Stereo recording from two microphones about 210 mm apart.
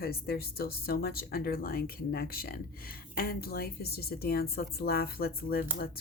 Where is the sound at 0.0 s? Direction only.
45° left (ahead or behind).